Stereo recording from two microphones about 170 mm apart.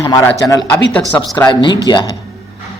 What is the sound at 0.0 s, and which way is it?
A man's voice, 15° left (ahead or behind).